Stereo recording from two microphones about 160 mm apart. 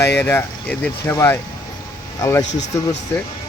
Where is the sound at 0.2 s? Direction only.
15° left (ahead or behind).